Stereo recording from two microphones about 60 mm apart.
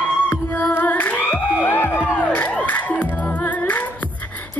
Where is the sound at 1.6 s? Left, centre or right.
Left.